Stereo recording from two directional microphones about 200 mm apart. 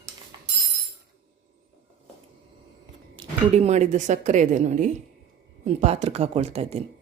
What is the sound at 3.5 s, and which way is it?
Speech, 35° right (ahead or behind).